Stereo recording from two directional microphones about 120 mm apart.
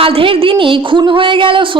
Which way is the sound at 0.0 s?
50° right (ahead or behind).